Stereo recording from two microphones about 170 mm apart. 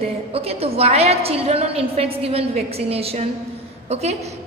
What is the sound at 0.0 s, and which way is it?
A woman's voice, 35° right (ahead or behind).